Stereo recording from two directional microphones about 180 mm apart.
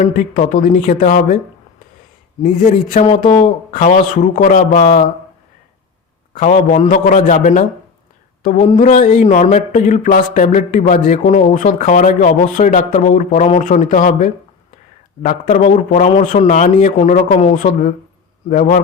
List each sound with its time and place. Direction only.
0.0 s mantra: 45° left (ahead or behind)
2.4 s mantra: 40° left (ahead or behind)
6.3 s mantra: 45° left (ahead or behind)